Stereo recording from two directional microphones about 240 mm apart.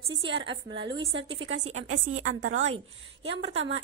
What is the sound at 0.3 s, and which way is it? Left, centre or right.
Speech, right.